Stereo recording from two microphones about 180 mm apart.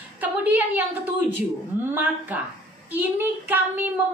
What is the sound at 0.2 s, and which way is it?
Speech, 10° right (ahead or behind).